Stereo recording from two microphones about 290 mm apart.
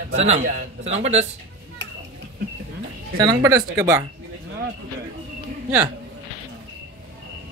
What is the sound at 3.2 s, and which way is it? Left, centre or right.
Speech, centre.